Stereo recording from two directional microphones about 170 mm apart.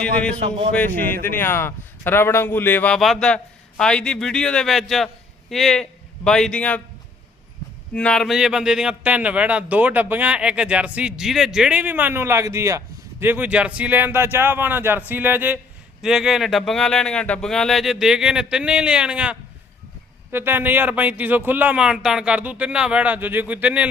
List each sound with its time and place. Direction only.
0.0 s a man's voice: 5° left (ahead or behind)
0.3 s speech: 35° right (ahead or behind)
0.7 s a man's voice: 10° left (ahead or behind)
7.9 s speech: 5° left (ahead or behind)